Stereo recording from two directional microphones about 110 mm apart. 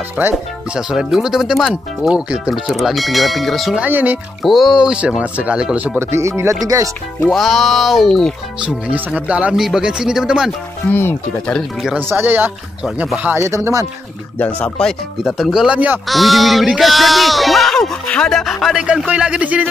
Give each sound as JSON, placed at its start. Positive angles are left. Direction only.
{"t": 0.2, "sound": "speech", "side_deg": -15}
{"t": 0.7, "sound": "speech", "side_deg": -5}
{"t": 3.8, "sound": "speech", "side_deg": -15}
{"t": 4.4, "sound": "speech", "side_deg": 0}
{"t": 5.9, "sound": "speech", "side_deg": -25}
{"t": 7.3, "sound": "speech", "side_deg": 0}
{"t": 8.5, "sound": "speech", "side_deg": -10}
{"t": 10.9, "sound": "speech", "side_deg": 20}
{"t": 11.4, "sound": "speech", "side_deg": 5}
{"t": 12.1, "sound": "speech", "side_deg": -20}
{"t": 12.8, "sound": "speech", "side_deg": -5}
{"t": 13.4, "sound": "speech", "side_deg": -25}
{"t": 14.8, "sound": "speech", "side_deg": 0}
{"t": 16.1, "sound": "speech", "side_deg": 0}